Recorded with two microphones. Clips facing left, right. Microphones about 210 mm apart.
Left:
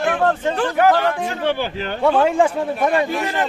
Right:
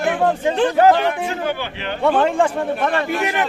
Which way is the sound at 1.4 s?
35° left (ahead or behind).